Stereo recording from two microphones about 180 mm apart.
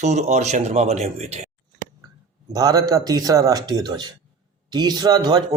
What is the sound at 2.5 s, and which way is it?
Speech, 20° right (ahead or behind).